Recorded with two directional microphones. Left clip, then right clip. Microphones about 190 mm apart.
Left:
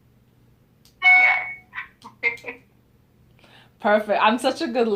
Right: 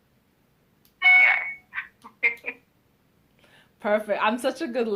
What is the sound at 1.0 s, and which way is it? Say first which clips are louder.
Fire alarm: left 2 dB; 30° right (ahead or behind).